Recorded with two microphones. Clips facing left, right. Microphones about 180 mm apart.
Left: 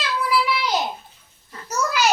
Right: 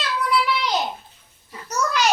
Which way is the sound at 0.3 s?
5° left (ahead or behind).